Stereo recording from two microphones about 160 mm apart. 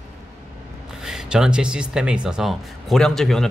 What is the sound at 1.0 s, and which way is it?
Speech, 5° right (ahead or behind).